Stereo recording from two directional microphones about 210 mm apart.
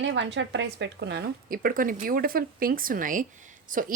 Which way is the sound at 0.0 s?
60° right (ahead or behind).